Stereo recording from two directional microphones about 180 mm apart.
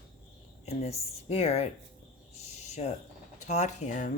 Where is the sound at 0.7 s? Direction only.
35° left (ahead or behind).